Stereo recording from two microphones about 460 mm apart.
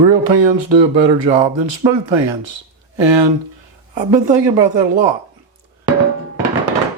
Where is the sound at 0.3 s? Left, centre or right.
Right.